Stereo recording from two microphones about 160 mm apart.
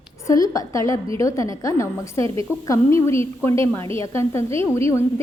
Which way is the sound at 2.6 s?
15° left (ahead or behind).